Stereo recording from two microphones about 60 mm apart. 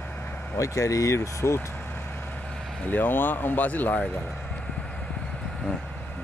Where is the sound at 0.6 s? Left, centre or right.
Left.